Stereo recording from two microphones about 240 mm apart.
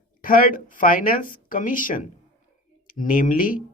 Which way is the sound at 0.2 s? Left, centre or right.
Left.